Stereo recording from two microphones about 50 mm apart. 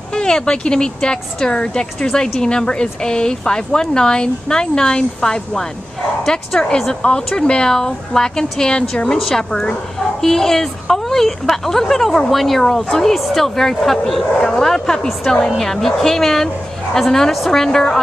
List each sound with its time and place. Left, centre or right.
0.1 s speech: centre